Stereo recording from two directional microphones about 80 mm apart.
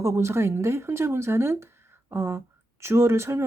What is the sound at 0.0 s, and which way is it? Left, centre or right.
Speech, right.